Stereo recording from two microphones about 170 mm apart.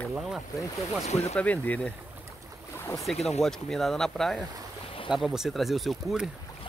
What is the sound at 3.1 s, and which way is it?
Speech, 40° left (ahead or behind).